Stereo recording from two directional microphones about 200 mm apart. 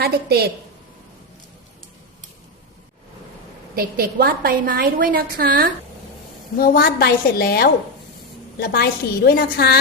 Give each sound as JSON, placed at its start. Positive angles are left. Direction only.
{"t": 0.0, "sound": "a woman's voice", "side_deg": -50}
{"t": 3.8, "sound": "a woman's voice", "side_deg": -50}
{"t": 6.6, "sound": "a woman's voice", "side_deg": 50}